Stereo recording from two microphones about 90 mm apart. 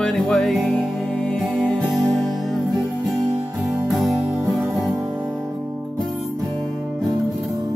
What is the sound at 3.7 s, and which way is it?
Music, centre (ahead or behind).